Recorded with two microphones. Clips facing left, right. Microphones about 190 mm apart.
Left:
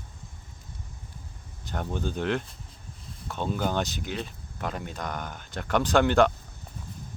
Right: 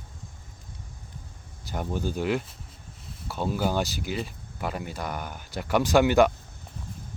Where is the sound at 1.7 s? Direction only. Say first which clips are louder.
Right 1 dB; 10° right (ahead or behind).